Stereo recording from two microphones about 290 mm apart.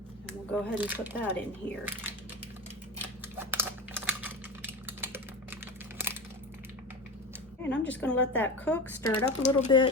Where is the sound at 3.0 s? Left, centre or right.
Centre.